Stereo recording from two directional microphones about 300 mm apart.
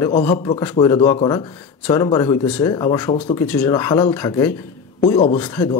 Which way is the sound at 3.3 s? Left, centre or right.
Centre.